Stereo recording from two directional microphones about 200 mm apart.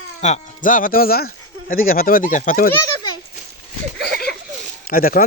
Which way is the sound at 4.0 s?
50° left (ahead or behind).